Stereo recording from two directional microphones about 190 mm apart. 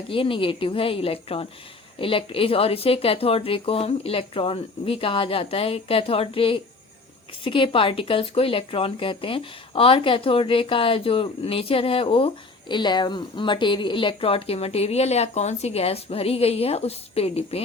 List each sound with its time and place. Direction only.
0.1 s speech: 25° left (ahead or behind)